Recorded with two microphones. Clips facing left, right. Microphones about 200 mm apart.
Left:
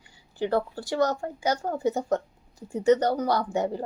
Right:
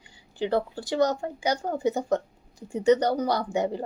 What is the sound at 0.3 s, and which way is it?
A woman's voice, 15° right (ahead or behind).